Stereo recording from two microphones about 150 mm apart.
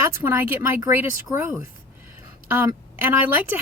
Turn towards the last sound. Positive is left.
turn(degrees=-10)  # may be behind; listen again after turning